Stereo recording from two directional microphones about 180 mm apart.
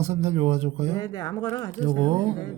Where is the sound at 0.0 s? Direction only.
35° right (ahead or behind).